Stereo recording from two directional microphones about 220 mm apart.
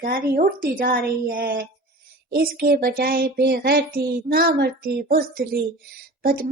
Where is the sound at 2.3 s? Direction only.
45° right (ahead or behind).